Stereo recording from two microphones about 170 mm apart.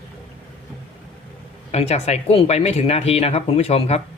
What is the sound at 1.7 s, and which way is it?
Speech, 40° left (ahead or behind).